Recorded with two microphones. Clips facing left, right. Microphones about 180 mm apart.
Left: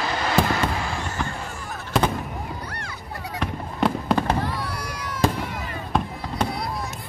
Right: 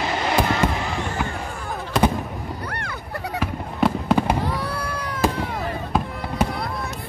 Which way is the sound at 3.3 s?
5° right (ahead or behind).